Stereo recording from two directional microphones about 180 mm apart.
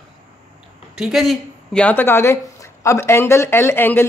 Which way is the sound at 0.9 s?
5° right (ahead or behind).